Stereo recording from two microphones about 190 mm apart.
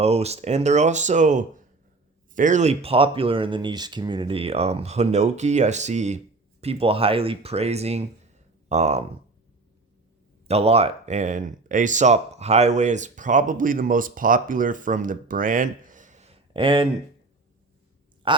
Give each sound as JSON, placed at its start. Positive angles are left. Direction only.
{"t": 0.0, "sound": "speech", "side_deg": -35}
{"t": 10.5, "sound": "speech", "side_deg": -30}
{"t": 18.3, "sound": "speech", "side_deg": -25}